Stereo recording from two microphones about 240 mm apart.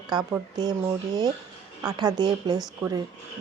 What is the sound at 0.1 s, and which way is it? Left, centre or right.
Speech, centre.